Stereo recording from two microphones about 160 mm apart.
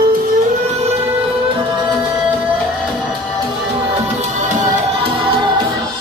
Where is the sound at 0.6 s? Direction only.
40° right (ahead or behind).